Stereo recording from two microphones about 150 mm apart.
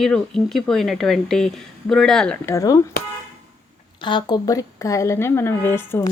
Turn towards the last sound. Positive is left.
turn(degrees=15)  # may be behind; listen again after turning